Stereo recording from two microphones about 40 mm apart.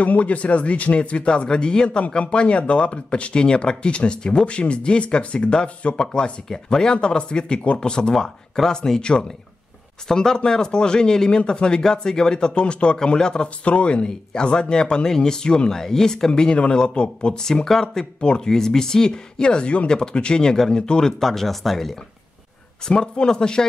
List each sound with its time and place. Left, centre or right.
0.0 s speech: left
5.9 s speech: left
8.1 s speech: centre
21.2 s speech: centre
22.8 s speech: centre